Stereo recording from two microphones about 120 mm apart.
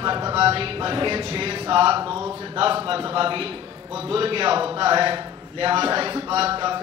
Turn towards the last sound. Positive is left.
turn(degrees=-45)  # may be behind; listen again after turning